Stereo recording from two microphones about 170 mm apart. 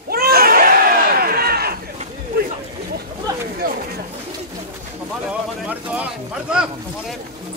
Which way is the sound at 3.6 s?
55° right (ahead or behind).